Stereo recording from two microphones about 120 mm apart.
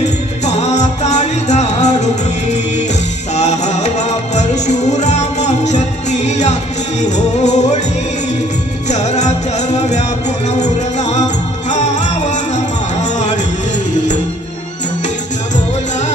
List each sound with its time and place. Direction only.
0.5 s music: 70° left (ahead or behind)
3.3 s music: 70° left (ahead or behind)
8.8 s music: 75° left (ahead or behind)